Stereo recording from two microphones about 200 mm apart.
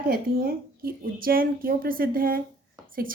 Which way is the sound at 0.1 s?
50° right (ahead or behind).